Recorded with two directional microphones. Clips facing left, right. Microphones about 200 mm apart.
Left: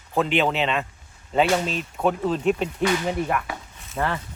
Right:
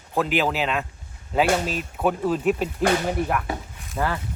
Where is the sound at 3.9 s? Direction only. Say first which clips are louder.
Even; centre (ahead or behind).